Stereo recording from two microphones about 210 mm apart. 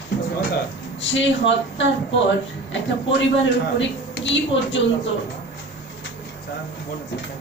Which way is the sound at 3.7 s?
60° left (ahead or behind).